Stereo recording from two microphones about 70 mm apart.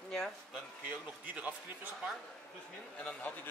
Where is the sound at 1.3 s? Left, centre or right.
Right.